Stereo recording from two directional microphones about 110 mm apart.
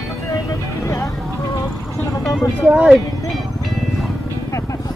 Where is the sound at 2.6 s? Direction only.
5° right (ahead or behind).